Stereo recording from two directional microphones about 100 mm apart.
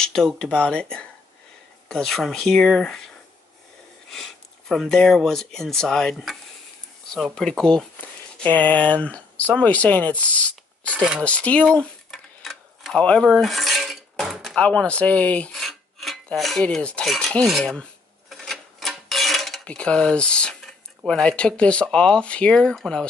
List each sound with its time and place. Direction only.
0.0 s speech: 5° left (ahead or behind)
4.1 s speech: centre (ahead or behind)
11.0 s speech: 10° right (ahead or behind)
11.2 s tick-tock: 10° left (ahead or behind)
14.6 s speech: 10° left (ahead or behind)
15.5 s filing: centre (ahead or behind)
16.6 s speech: 10° left (ahead or behind)
18.3 s a sound: centre (ahead or behind)
19.6 s speech: 10° left (ahead or behind)